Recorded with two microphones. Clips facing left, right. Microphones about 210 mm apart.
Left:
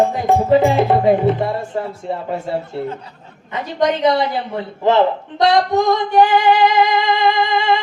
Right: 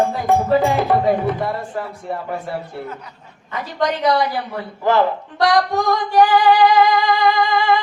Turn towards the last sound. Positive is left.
turn(degrees=25)  # may be behind; listen again after turning